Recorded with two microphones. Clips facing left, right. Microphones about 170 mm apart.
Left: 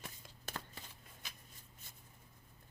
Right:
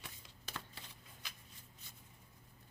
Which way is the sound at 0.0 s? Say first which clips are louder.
Left 3 dB; 45° left (ahead or behind).